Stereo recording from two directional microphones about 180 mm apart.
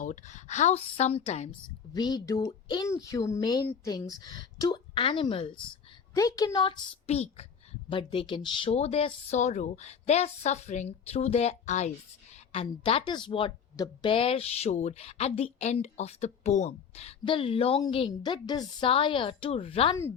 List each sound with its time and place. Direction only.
0.0 s speech: 45° left (ahead or behind)
1.9 s speech: 25° left (ahead or behind); by 11.9 s 40° left (ahead or behind)
12.5 s speech: 30° left (ahead or behind)